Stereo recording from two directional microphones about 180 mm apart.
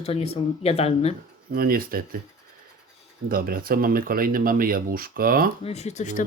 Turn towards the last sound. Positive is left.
turn(degrees=40)  # may be behind; listen again after turning